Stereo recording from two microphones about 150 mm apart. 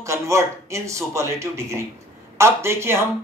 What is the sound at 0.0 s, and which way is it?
A man's voice, 20° right (ahead or behind).